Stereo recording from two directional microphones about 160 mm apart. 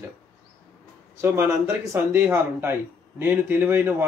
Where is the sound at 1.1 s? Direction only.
15° right (ahead or behind).